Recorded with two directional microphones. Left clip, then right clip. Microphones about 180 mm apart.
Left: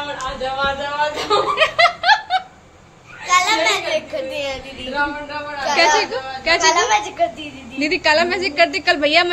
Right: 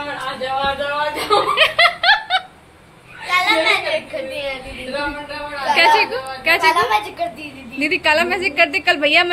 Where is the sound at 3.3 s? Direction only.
70° left (ahead or behind).